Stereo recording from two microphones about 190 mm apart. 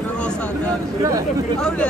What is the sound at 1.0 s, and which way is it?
Speech, 15° right (ahead or behind).